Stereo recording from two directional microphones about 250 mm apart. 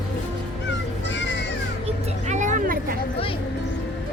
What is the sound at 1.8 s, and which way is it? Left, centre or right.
Vehicle, right.